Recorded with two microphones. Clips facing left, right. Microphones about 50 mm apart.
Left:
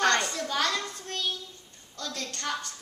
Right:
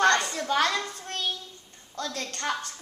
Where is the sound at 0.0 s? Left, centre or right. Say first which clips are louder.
Right 3 dB; right.